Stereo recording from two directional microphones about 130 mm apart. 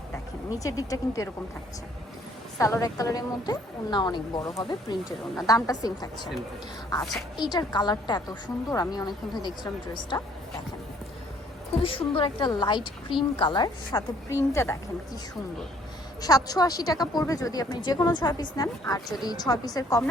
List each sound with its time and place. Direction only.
0.6 s a woman's voice: 25° left (ahead or behind)
2.6 s a woman's voice: 25° left (ahead or behind)
11.7 s a woman's voice: 45° left (ahead or behind); by 15.2 s 20° left (ahead or behind)
16.2 s a woman's voice: 30° left (ahead or behind)